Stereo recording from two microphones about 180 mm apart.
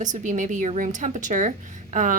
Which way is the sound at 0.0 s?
45° right (ahead or behind).